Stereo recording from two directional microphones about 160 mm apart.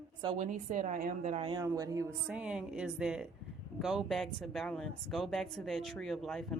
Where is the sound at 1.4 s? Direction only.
25° right (ahead or behind).